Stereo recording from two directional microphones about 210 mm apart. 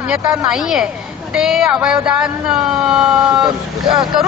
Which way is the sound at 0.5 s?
5° right (ahead or behind).